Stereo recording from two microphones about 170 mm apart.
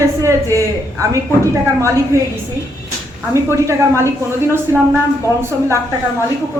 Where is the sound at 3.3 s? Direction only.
15° right (ahead or behind).